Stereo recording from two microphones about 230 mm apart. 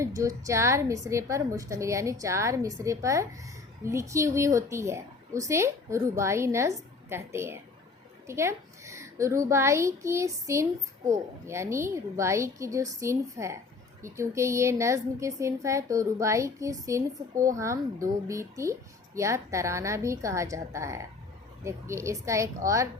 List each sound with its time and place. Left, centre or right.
0.0 s a woman's voice: centre